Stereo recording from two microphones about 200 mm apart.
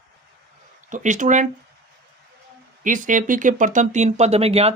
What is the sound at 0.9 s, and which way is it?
Speech, 40° right (ahead or behind).